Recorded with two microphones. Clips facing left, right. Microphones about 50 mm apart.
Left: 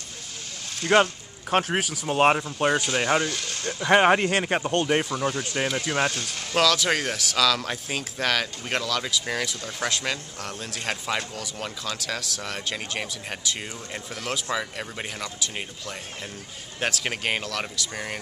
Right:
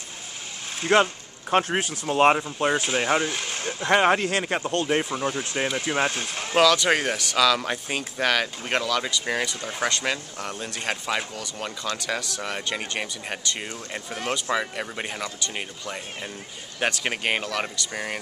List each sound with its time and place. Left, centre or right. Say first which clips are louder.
0.8 s speech: even; centre
3.3 s speech: right 1 dB; right
3.9 s speech: left 1 dB; centre
5.2 s speech: even; centre
6.6 s speech: right 3 dB; centre